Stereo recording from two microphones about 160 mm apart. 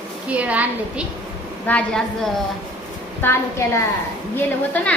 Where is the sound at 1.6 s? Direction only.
5° left (ahead or behind).